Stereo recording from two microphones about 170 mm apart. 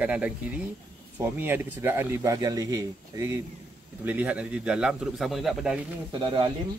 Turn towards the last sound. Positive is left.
turn(degrees=-30)  # may be behind; listen again after turning